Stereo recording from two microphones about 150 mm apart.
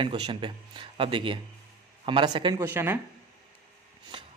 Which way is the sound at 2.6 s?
15° right (ahead or behind).